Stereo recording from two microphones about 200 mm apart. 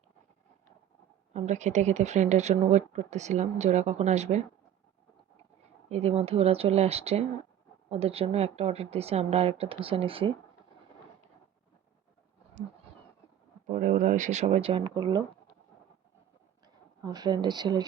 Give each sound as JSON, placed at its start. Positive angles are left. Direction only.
{"t": 1.3, "sound": "speech", "side_deg": -35}
{"t": 5.9, "sound": "speech", "side_deg": -30}
{"t": 13.7, "sound": "speech", "side_deg": -40}
{"t": 17.0, "sound": "speech", "side_deg": -20}